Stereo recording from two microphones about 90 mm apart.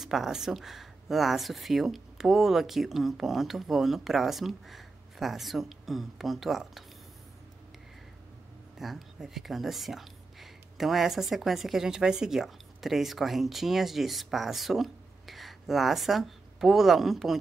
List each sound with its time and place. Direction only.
0.0 s speech: 5° right (ahead or behind)
8.7 s speech: 5° right (ahead or behind)